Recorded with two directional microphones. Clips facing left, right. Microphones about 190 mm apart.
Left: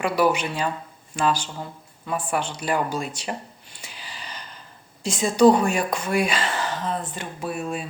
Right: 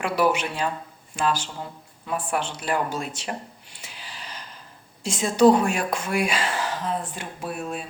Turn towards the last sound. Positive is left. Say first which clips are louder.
# left 2 dB
turn(degrees=0)  # may be behind; listen again after turning